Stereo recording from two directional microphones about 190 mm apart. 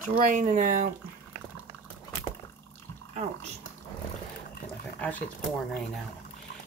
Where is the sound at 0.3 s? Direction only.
45° right (ahead or behind).